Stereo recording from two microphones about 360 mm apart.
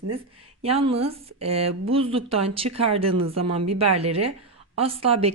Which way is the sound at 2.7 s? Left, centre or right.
Right.